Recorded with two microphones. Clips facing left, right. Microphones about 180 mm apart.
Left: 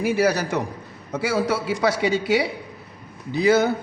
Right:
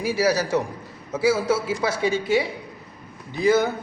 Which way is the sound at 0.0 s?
60° left (ahead or behind).